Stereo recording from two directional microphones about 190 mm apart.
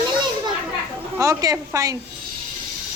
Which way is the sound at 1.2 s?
20° right (ahead or behind).